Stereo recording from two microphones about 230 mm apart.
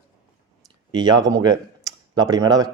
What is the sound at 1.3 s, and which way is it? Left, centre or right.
Speech, centre.